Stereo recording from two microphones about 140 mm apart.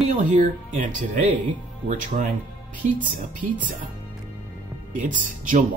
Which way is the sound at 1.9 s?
75° right (ahead or behind).